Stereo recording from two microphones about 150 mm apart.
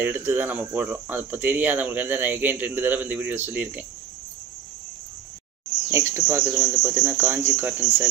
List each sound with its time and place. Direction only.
0.0 s speech: 15° right (ahead or behind)
5.9 s speech: 20° right (ahead or behind)